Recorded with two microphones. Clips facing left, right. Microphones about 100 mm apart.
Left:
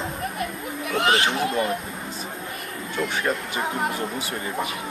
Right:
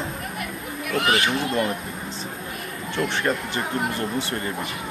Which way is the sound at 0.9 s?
25° left (ahead or behind).